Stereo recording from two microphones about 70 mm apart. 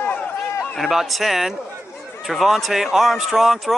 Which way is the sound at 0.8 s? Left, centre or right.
Centre.